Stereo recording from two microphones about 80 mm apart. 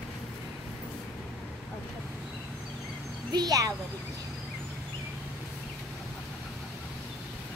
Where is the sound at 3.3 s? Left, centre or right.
Right.